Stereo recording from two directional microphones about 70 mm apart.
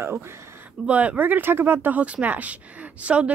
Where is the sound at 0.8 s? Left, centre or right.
Right.